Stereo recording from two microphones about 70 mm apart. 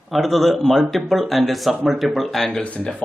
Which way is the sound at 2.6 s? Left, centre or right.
Centre.